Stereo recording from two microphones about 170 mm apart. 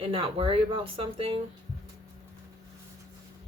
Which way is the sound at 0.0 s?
30° right (ahead or behind).